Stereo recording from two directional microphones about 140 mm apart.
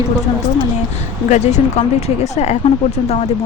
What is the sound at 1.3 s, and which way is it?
A woman's voice, 55° left (ahead or behind).